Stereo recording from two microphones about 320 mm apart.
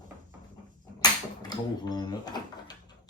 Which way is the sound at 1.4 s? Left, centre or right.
Centre.